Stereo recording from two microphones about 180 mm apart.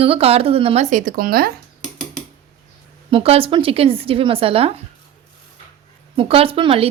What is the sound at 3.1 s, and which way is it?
Speech, 30° right (ahead or behind).